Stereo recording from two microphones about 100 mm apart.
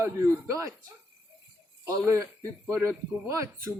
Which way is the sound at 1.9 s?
30° right (ahead or behind).